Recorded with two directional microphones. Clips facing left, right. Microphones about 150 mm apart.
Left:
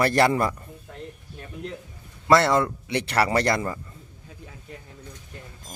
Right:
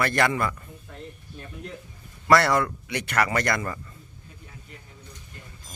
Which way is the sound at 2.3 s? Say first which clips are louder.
Left 1 dB; 25° left (ahead or behind).